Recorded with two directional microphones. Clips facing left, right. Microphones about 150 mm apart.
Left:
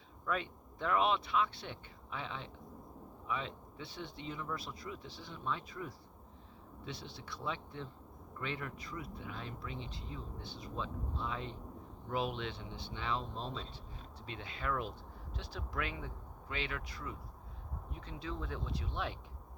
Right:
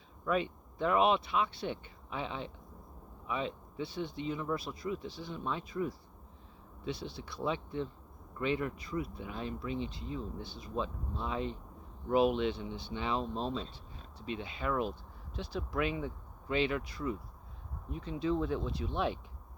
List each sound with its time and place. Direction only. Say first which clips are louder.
0.3 s speech: right 6 dB; 10° right (ahead or behind)